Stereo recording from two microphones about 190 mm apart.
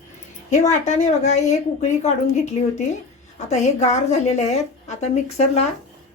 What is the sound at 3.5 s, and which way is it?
A woman's voice, 35° left (ahead or behind).